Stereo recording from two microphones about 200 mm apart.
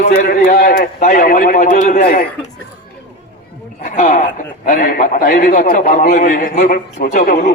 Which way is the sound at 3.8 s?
40° left (ahead or behind).